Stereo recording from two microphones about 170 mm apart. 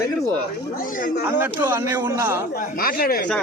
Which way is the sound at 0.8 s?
55° left (ahead or behind).